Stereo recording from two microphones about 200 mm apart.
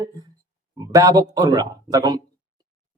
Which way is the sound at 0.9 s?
15° right (ahead or behind).